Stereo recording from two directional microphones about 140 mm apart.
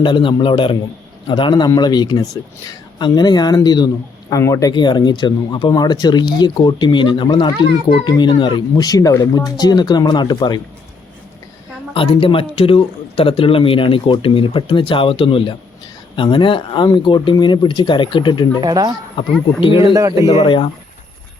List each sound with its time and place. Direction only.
0.0 s speech: 35° left (ahead or behind)
4.7 s speech: 30° left (ahead or behind)
11.9 s speech: 40° left (ahead or behind)
18.6 s a man's voice: 30° right (ahead or behind)
19.2 s speech: 35° left (ahead or behind)
19.8 s a man's voice: 25° right (ahead or behind)
20.3 s speech: 35° left (ahead or behind)